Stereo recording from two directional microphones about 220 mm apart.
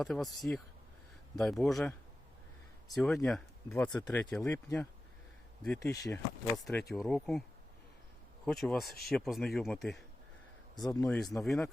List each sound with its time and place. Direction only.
0.0 s speech: centre (ahead or behind)
8.5 s speech: centre (ahead or behind)
10.8 s a man's voice: 15° left (ahead or behind)
11.0 s speech: centre (ahead or behind)